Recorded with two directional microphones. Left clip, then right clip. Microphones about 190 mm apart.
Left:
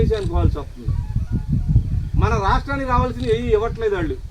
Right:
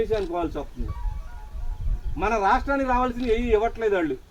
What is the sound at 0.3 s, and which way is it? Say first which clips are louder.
Speech: left 1 dB; 15° right (ahead or behind).